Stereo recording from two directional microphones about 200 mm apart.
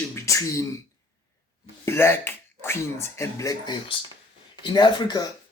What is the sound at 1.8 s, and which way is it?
Speech, 10° left (ahead or behind).